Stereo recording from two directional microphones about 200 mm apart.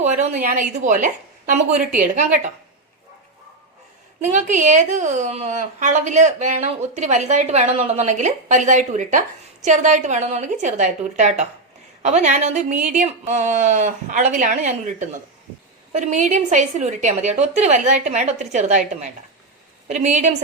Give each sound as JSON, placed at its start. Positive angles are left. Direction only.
{"t": 0.0, "sound": "a woman's voice", "side_deg": -35}
{"t": 4.2, "sound": "a woman's voice", "side_deg": -35}